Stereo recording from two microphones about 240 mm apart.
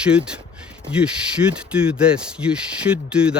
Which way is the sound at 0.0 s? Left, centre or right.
Centre.